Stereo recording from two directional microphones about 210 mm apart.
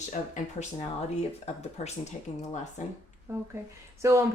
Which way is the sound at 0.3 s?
35° left (ahead or behind).